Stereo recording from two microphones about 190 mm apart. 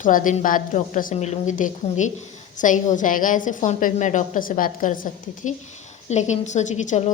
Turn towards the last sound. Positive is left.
turn(degrees=40)  # may be behind; listen again after turning